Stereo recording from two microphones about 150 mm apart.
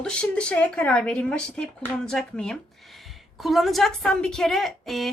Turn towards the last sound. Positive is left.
turn(degrees=0)  # may be behind; listen again after turning